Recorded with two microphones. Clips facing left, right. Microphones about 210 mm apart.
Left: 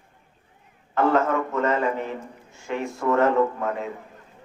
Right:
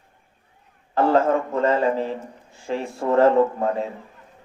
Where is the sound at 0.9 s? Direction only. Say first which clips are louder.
Right 3 dB; 30° right (ahead or behind).